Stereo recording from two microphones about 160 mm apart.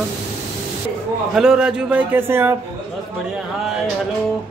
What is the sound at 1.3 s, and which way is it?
A man's voice, 5° right (ahead or behind).